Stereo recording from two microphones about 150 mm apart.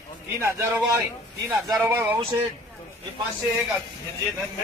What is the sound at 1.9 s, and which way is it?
Speech, 15° right (ahead or behind).